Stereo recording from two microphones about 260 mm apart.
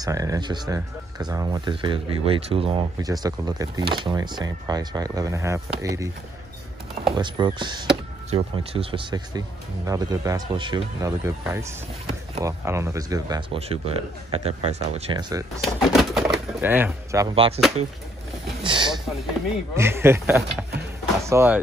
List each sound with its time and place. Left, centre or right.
0.0 s speech: centre
7.2 s speech: centre
15.6 s speech: centre
18.6 s speech: centre